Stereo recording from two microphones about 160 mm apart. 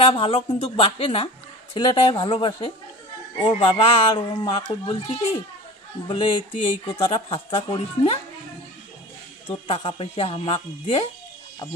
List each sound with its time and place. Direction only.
0.0 s a woman's voice: 35° left (ahead or behind)
9.7 s a woman's voice: 35° left (ahead or behind)